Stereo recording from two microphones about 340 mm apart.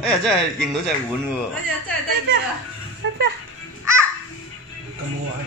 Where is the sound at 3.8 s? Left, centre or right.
Centre.